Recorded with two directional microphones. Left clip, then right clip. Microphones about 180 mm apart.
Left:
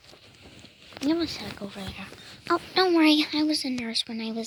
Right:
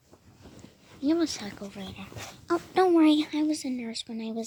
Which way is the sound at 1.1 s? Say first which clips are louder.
Right 1 dB; 20° right (ahead or behind).